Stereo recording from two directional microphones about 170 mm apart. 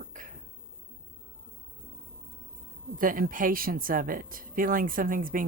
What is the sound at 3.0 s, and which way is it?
Speech, 55° right (ahead or behind).